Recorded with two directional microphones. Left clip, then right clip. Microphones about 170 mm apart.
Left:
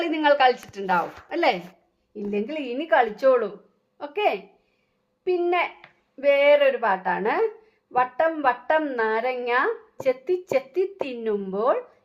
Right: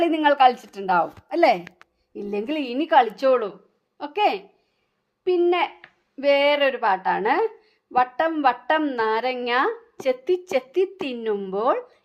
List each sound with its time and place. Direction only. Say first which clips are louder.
0.0 s a woman's voice: right 2 dB; 40° right (ahead or behind)